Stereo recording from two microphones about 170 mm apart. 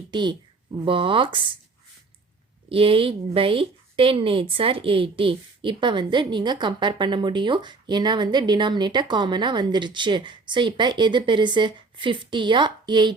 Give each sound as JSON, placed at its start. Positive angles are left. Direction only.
{"t": 0.1, "sound": "speech", "side_deg": -25}
{"t": 2.6, "sound": "a woman's voice", "side_deg": -35}